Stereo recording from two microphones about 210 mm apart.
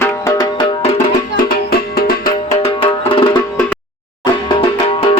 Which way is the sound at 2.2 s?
25° left (ahead or behind).